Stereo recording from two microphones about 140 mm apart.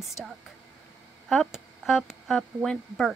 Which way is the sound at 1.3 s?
Centre (ahead or behind).